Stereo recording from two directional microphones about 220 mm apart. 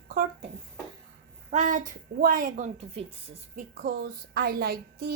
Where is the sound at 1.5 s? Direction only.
35° right (ahead or behind).